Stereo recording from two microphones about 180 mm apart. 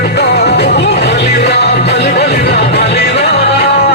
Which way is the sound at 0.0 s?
65° left (ahead or behind).